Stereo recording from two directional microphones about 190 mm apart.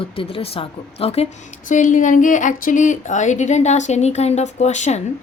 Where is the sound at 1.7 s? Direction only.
40° left (ahead or behind).